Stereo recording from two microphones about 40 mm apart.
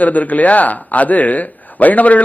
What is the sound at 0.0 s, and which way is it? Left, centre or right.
A man's voice, left.